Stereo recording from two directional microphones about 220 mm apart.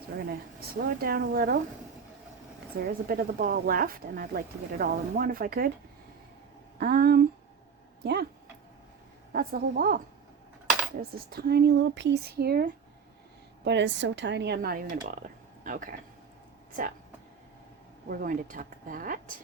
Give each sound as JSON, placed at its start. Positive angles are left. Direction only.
{"t": 0.8, "sound": "speech", "side_deg": -45}
{"t": 2.8, "sound": "speech", "side_deg": -40}
{"t": 6.7, "sound": "speech", "side_deg": -40}
{"t": 9.3, "sound": "speech", "side_deg": -40}
{"t": 11.3, "sound": "speech", "side_deg": -45}
{"t": 18.1, "sound": "speech", "side_deg": -40}